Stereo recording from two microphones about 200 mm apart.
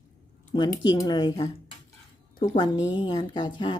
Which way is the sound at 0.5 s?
20° left (ahead or behind).